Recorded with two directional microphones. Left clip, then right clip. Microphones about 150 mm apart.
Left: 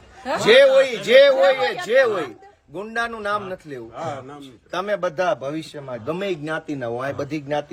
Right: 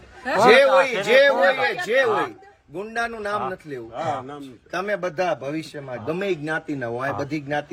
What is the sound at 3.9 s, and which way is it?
Speech, 40° right (ahead or behind).